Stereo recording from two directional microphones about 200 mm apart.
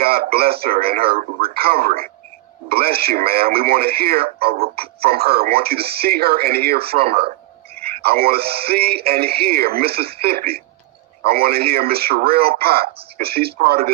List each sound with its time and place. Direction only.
0.0 s speech: 50° right (ahead or behind)
7.1 s speech: 30° right (ahead or behind)
8.0 s speech: 50° right (ahead or behind)